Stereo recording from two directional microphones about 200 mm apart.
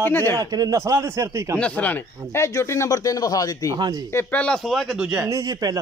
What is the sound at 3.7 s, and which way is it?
Speech, 20° right (ahead or behind).